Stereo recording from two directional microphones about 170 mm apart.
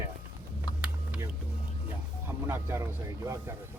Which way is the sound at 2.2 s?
15° right (ahead or behind).